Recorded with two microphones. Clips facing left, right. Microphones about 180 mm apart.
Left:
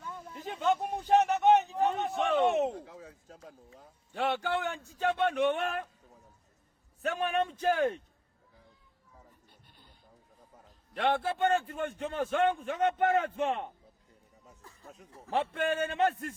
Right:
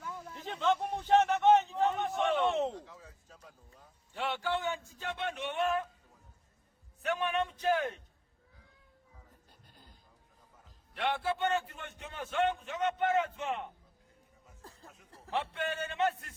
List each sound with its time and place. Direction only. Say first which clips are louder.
0.3 s a sound: left 1 dB; 10° left (ahead or behind)
2.7 s a man's voice: left 3 dB; 55° left (ahead or behind)
7.0 s a man's voice: left 2 dB; 45° left (ahead or behind)
9.6 s a sound: right 4 dB; 90° right
10.9 s a man's voice: left 4 dB; 50° left (ahead or behind)
14.6 s chuckle: right 7 dB; 35° right (ahead or behind)
14.8 s speech: left 5 dB; 35° left (ahead or behind)
15.5 s a man's voice: left 5 dB; 50° left (ahead or behind)